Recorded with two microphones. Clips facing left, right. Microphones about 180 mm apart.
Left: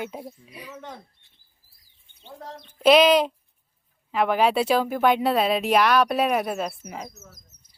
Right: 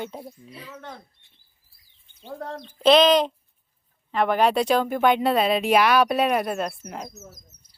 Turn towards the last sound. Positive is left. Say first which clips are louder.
# right 1 dB
turn(degrees=5)  # may be behind; listen again after turning